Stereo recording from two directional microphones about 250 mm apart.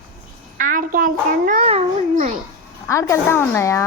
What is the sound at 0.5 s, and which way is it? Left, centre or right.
A child's voice, right.